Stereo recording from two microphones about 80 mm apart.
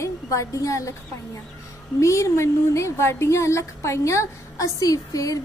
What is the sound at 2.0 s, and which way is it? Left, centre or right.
A woman's voice, left.